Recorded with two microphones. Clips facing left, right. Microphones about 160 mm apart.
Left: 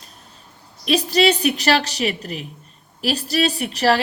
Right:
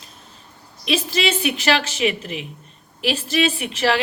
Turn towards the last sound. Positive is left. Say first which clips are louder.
# left 2 dB
turn(degrees=40)  # may be behind; listen again after turning